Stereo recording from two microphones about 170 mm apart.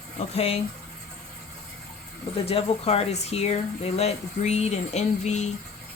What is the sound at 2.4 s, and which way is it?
Speech, 35° left (ahead or behind).